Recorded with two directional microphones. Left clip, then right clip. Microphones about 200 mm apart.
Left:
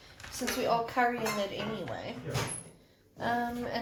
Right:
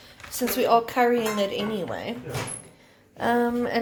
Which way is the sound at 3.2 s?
50° right (ahead or behind).